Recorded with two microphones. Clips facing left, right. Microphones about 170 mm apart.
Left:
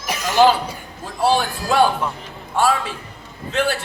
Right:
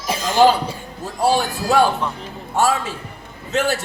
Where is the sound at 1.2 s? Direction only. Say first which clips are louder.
Even; 45° right (ahead or behind).